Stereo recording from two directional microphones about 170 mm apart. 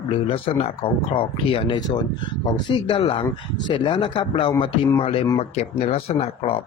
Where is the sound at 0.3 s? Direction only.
35° left (ahead or behind).